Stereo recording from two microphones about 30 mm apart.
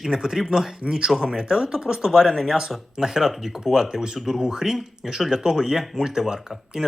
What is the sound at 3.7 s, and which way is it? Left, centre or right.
Speech, right.